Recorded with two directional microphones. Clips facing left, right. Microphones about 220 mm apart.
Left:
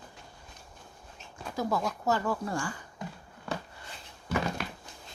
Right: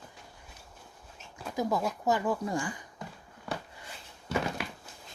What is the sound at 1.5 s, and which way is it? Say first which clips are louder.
Speech: right 1 dB; 15° right (ahead or behind).